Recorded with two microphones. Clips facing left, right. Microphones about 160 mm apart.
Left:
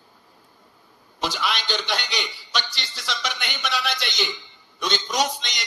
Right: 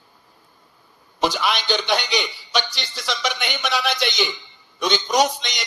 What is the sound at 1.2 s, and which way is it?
A man's voice, 55° right (ahead or behind).